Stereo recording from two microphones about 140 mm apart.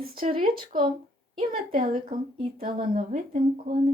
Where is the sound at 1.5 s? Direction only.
75° right (ahead or behind).